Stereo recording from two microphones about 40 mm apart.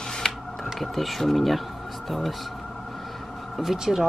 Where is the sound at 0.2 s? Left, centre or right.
Centre.